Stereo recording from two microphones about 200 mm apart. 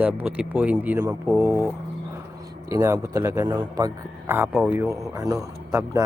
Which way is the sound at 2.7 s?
15° right (ahead or behind).